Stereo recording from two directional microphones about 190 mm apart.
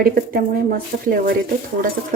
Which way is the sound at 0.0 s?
50° right (ahead or behind).